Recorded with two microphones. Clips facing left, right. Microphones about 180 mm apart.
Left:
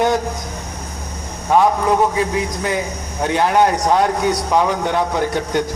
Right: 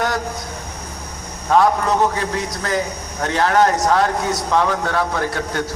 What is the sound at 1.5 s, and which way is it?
A man's voice, 15° left (ahead or behind).